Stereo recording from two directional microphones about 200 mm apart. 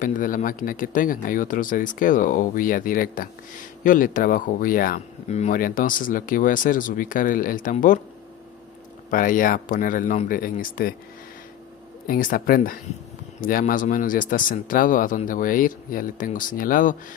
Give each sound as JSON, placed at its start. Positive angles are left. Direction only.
{"t": 0.0, "sound": "speech", "side_deg": 45}
{"t": 9.1, "sound": "speech", "side_deg": 45}
{"t": 12.1, "sound": "speech", "side_deg": 45}